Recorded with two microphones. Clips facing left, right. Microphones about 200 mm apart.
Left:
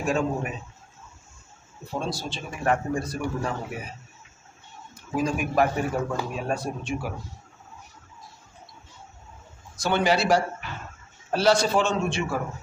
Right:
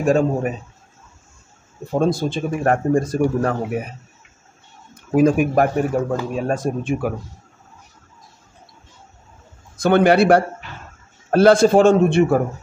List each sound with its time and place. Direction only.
0.0 s a man's voice: 45° right (ahead or behind)
1.9 s a man's voice: 55° right (ahead or behind)
4.9 s a man's voice: 55° right (ahead or behind)
9.8 s a man's voice: 55° right (ahead or behind)